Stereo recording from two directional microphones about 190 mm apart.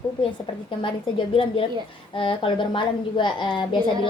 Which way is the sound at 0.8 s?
30° left (ahead or behind).